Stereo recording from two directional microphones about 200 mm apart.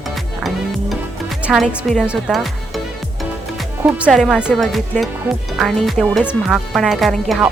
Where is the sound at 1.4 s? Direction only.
5° right (ahead or behind).